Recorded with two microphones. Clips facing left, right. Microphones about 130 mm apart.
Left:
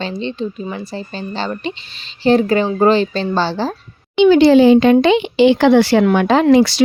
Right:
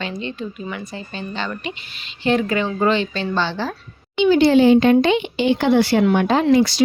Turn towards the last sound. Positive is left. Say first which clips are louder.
# left 4 dB
turn(degrees=85)